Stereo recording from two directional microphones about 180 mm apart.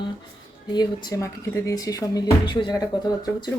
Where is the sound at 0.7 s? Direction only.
25° left (ahead or behind).